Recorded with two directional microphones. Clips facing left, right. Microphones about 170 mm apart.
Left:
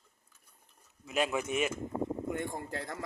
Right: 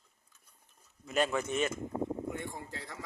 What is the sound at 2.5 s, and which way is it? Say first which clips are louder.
Speech: left 5 dB; 50° left (ahead or behind).